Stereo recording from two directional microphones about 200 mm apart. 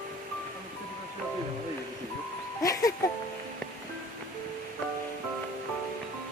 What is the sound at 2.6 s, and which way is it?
Speech, 15° left (ahead or behind).